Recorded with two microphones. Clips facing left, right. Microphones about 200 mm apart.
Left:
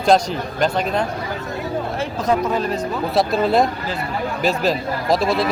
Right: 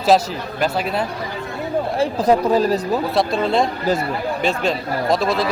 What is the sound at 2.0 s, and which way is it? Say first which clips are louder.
Speech: right 4 dB; 35° right (ahead or behind).